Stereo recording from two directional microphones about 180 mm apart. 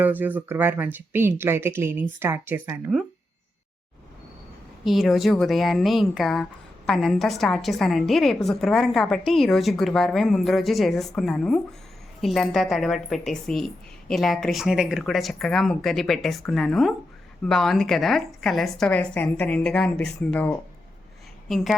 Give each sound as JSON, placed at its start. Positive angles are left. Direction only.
{"t": 0.0, "sound": "speech", "side_deg": -10}
{"t": 4.9, "sound": "speech", "side_deg": 0}